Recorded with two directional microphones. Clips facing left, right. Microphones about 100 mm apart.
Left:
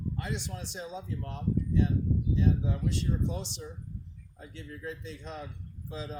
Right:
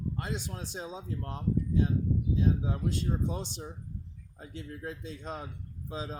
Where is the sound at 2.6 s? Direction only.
45° right (ahead or behind).